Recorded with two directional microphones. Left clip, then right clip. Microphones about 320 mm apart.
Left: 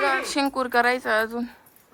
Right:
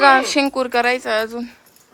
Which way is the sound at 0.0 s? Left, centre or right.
Right.